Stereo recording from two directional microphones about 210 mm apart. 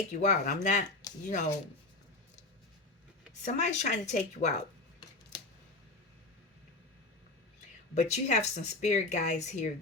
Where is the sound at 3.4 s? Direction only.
35° left (ahead or behind).